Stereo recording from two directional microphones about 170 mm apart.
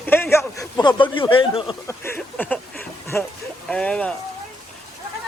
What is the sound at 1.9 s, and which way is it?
Speech, 10° left (ahead or behind).